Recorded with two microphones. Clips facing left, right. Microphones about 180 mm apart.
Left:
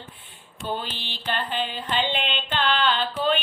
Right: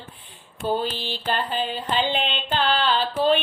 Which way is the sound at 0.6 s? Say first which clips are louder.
Right 6 dB; 35° right (ahead or behind).